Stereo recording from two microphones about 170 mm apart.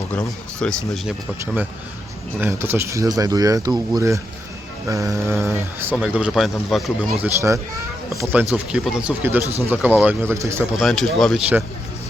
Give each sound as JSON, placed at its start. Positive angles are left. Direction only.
{"t": 0.1, "sound": "speech", "side_deg": 5}
{"t": 2.4, "sound": "speech", "side_deg": -15}
{"t": 10.8, "sound": "speech", "side_deg": 0}